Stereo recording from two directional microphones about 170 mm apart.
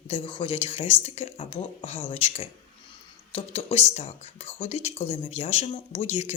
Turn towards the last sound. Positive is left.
turn(degrees=40)  # may be behind; listen again after turning